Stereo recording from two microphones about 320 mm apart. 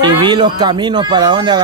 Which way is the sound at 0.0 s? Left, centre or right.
Centre.